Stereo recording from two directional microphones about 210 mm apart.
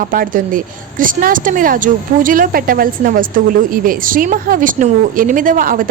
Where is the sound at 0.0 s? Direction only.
40° right (ahead or behind).